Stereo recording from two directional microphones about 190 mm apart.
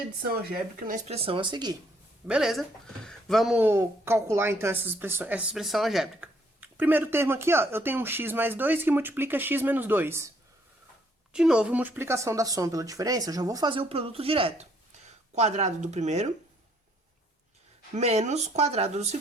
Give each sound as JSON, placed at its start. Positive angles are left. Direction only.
{"t": 0.9, "sound": "speech", "side_deg": -40}
{"t": 2.2, "sound": "speech", "side_deg": -5}
{"t": 17.9, "sound": "speech", "side_deg": -35}